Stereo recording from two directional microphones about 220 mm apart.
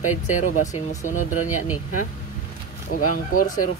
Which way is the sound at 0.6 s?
35° left (ahead or behind).